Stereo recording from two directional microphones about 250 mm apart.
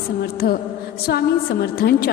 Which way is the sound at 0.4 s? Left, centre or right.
Left.